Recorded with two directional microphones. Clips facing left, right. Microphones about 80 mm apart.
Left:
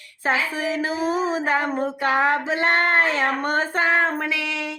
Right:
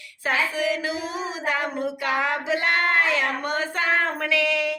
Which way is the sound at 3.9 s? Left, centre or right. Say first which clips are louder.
Left 2 dB; left.